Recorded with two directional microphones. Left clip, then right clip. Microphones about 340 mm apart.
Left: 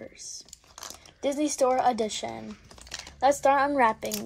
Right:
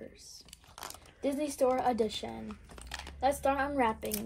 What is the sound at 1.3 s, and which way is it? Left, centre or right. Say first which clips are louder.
Speech: left 7 dB; left.